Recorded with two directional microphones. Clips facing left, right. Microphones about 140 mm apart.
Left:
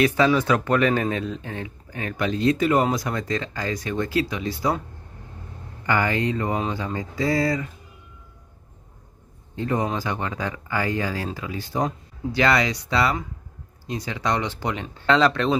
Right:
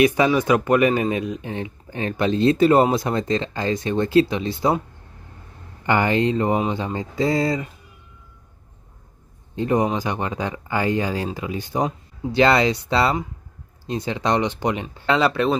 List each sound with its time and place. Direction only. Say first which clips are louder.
0.0 s speech: right 2 dB; 15° right (ahead or behind)
5.9 s speech: right 4 dB; 25° right (ahead or behind)
9.6 s speech: right 4 dB; 20° right (ahead or behind)
15.0 s speech: even; 5° right (ahead or behind)